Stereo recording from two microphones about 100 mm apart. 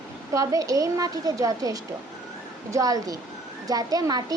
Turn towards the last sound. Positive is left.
turn(degrees=-40)  # may be behind; listen again after turning